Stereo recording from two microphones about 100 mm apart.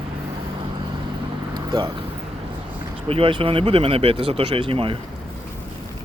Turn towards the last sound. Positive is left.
turn(degrees=-65)  # may be behind; listen again after turning